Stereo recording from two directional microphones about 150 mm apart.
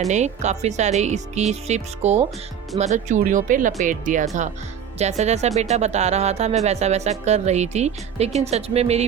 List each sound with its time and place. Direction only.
0.1 s speech: 50° right (ahead or behind)